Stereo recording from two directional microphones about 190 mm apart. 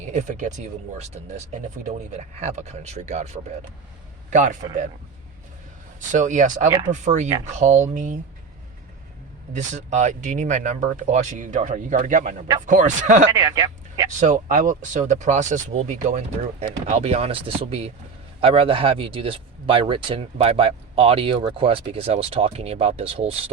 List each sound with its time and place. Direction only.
0.0 s speech: 40° right (ahead or behind)
6.1 s speech: 40° right (ahead or behind)
9.5 s speech: 40° right (ahead or behind)
13.3 s speech: 20° right (ahead or behind)
14.1 s speech: 40° right (ahead or behind)